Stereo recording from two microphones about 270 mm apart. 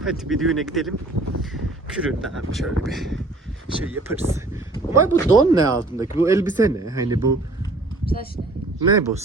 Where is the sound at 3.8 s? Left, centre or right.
Right.